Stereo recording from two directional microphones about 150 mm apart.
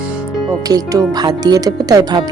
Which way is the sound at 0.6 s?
25° right (ahead or behind).